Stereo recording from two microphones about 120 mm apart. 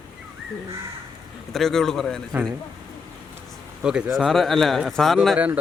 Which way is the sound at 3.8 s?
5° right (ahead or behind).